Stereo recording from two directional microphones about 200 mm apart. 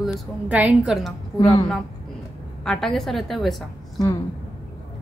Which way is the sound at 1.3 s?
20° left (ahead or behind).